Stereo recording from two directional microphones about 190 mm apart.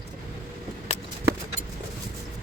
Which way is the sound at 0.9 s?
35° left (ahead or behind).